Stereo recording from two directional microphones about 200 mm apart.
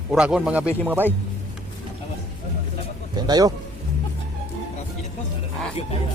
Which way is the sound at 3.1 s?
20° right (ahead or behind).